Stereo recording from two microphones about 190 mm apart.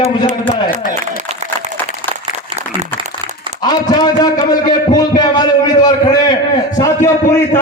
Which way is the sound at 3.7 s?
20° left (ahead or behind).